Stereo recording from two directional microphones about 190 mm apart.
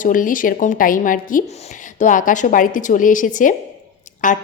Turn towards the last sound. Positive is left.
turn(degrees=45)  # may be behind; listen again after turning